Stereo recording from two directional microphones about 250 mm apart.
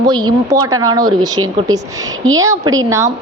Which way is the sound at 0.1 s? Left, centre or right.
Centre.